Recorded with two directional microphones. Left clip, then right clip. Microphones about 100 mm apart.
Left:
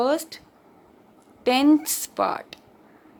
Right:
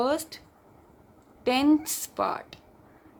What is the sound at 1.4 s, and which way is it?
A woman's voice, 50° left (ahead or behind).